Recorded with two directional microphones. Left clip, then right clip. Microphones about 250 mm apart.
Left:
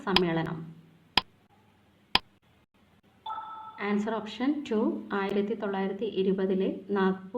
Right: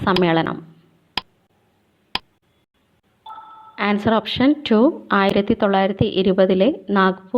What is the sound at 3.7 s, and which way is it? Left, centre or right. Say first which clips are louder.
A woman's voice: right 13 dB; right.